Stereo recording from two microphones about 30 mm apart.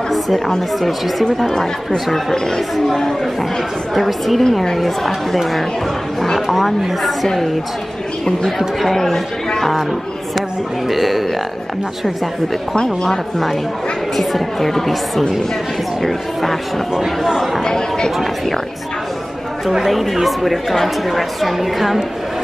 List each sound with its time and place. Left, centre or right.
3.9 s a woman's voice: centre
6.4 s a woman's voice: centre
8.8 s speech: centre
10.9 s a woman's voice: centre
12.8 s speech: centre
14.1 s a woman's voice: centre
17.6 s speech: left
19.8 s a woman's voice: centre